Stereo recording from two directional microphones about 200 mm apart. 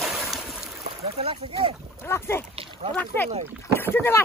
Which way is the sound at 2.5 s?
25° right (ahead or behind).